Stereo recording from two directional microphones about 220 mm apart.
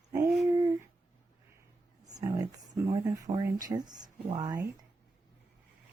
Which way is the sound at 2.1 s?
15° right (ahead or behind).